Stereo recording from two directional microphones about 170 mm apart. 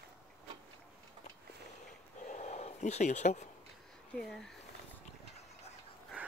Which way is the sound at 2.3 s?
40° left (ahead or behind).